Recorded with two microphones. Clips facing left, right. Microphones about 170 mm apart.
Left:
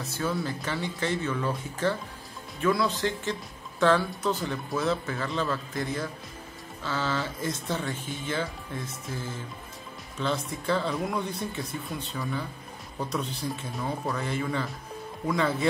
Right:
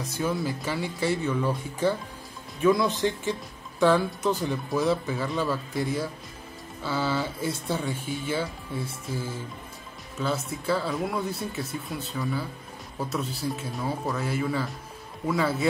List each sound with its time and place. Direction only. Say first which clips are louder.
0.0 s speech: right 2 dB; 15° right (ahead or behind)